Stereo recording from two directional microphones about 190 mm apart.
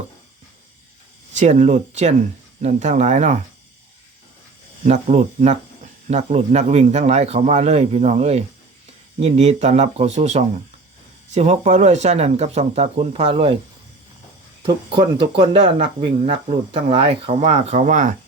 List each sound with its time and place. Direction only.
1.3 s speech: 40° right (ahead or behind)
4.9 s speech: 35° right (ahead or behind)
14.6 s speech: 25° right (ahead or behind)